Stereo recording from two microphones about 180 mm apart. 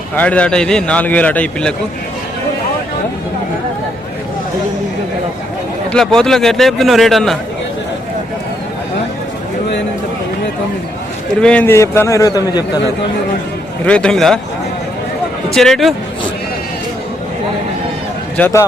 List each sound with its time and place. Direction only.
0.2 s a man's voice: 5° left (ahead or behind)
5.9 s a man's voice: 5° left (ahead or behind)
11.3 s a man's voice: 5° left (ahead or behind); by 12.8 s 20° left (ahead or behind)
13.8 s a man's voice: 5° left (ahead or behind)
15.4 s a man's voice: centre (ahead or behind)
18.3 s a man's voice: 10° left (ahead or behind)